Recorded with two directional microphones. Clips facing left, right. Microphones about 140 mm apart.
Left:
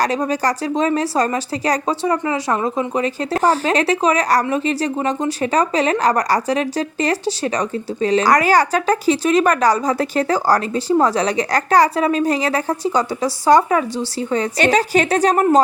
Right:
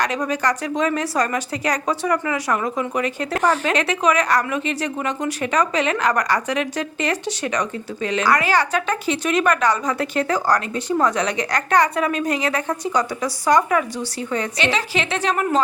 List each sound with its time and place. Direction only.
0.0 s a woman's voice: 35° left (ahead or behind)
14.6 s a woman's voice: 45° left (ahead or behind)